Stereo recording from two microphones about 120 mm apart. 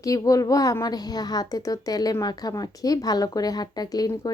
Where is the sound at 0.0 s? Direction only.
30° left (ahead or behind).